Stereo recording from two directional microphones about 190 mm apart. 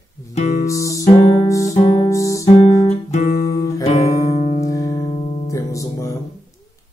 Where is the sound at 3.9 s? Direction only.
35° left (ahead or behind).